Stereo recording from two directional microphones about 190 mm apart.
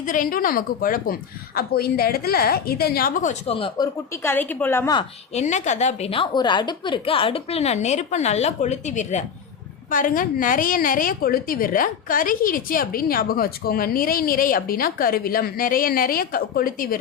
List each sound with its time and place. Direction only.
0.0 s a woman's voice: 45° left (ahead or behind)
3.5 s speech: 30° left (ahead or behind)
4.2 s a woman's voice: 10° left (ahead or behind)
4.9 s a woman's voice: 35° left (ahead or behind)